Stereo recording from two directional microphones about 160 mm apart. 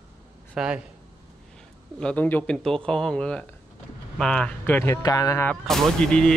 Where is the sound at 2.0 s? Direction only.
10° left (ahead or behind).